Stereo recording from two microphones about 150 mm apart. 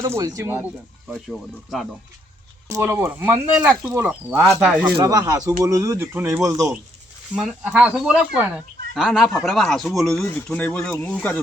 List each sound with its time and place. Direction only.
0.0 s speech: 20° right (ahead or behind)
1.0 s speech: centre (ahead or behind)
2.6 s speech: 20° right (ahead or behind)
4.9 s speech: 25° right (ahead or behind)
7.3 s speech: 5° right (ahead or behind)
10.2 s speech: 10° left (ahead or behind)